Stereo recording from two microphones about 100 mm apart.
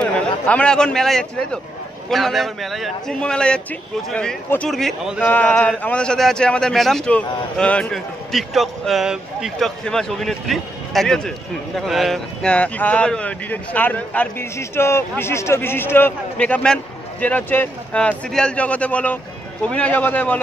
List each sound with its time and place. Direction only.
0.0 s a man's voice: 15° left (ahead or behind)
5.2 s a man's voice: 15° left (ahead or behind); by 9.7 s 5° right (ahead or behind)
9.8 s a man's voice: 5° left (ahead or behind)
14.6 s a man's voice: 25° left (ahead or behind)
16.3 s a man's voice: 10° left (ahead or behind)